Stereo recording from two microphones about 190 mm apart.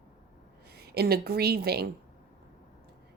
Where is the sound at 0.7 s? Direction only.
55° right (ahead or behind).